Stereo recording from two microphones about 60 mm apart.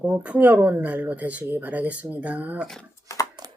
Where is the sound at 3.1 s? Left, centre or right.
Left.